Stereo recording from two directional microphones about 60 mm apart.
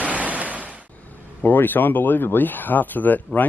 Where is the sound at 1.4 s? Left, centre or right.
Left.